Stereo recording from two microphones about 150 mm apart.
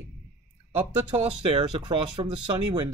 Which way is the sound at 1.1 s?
30° right (ahead or behind).